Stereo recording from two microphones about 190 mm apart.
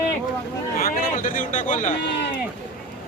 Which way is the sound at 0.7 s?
50° left (ahead or behind).